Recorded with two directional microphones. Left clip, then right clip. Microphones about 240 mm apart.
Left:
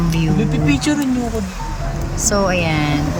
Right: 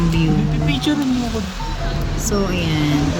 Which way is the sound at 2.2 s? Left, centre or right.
Centre.